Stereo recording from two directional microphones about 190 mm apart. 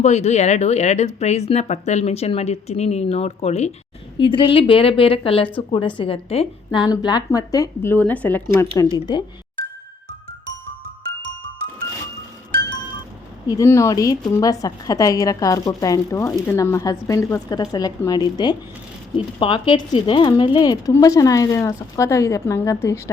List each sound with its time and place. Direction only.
0.0 s a woman's voice: 35° left (ahead or behind); by 8.4 s 10° left (ahead or behind)
8.8 s a woman's voice: 20° left (ahead or behind)
13.5 s speech: 15° left (ahead or behind)